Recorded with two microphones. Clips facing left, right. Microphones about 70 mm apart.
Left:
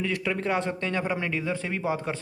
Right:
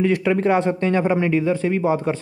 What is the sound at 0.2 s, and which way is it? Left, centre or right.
Speech, right.